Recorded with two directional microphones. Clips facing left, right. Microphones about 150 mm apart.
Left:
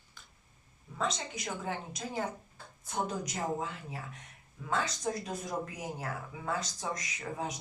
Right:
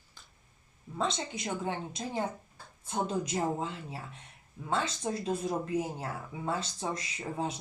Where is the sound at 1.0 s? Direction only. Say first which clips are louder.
Right 2 dB; 30° right (ahead or behind).